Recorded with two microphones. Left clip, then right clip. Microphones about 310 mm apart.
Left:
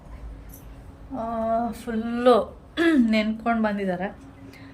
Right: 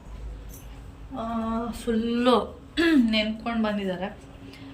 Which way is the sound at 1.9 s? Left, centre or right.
Centre.